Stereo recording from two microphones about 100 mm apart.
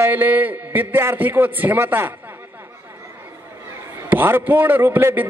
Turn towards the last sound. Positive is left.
turn(degrees=-20)  # may be behind; listen again after turning